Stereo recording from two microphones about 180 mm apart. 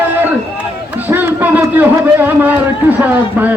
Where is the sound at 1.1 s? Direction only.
10° right (ahead or behind).